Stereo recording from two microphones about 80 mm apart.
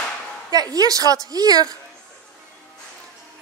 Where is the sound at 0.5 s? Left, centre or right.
Right.